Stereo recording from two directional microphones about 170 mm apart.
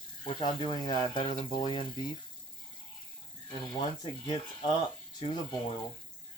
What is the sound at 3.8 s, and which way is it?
Speech, 30° left (ahead or behind).